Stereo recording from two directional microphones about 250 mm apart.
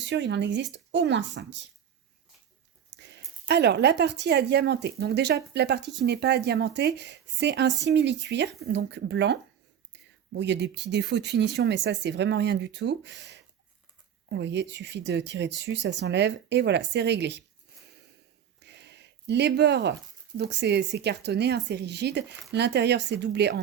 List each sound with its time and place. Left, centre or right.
0.0 s speech: right
2.9 s speech: right
18.6 s speech: right